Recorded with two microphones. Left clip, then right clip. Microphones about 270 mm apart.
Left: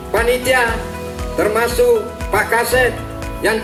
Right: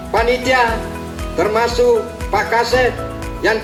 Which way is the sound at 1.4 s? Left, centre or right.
Right.